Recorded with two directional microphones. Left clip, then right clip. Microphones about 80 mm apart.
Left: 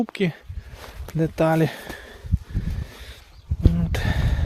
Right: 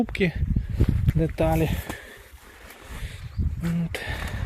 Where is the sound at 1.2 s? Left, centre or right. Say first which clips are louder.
Left 4 dB; left.